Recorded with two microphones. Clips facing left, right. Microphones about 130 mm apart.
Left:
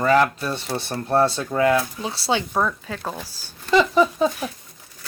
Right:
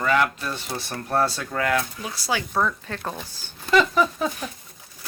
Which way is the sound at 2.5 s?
10° left (ahead or behind).